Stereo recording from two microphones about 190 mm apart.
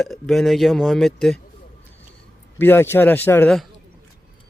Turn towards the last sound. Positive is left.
turn(degrees=5)  # may be behind; listen again after turning